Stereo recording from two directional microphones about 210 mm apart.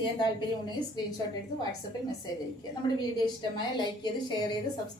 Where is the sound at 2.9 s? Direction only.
20° left (ahead or behind).